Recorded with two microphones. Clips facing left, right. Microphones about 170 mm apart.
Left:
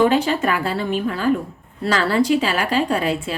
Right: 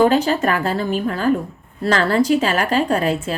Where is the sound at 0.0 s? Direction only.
40° right (ahead or behind).